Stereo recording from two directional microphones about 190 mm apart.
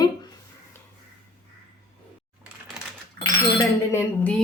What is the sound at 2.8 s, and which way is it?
Coin, 5° right (ahead or behind).